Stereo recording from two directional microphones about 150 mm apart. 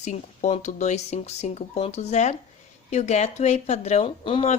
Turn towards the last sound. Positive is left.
turn(degrees=40)  # may be behind; listen again after turning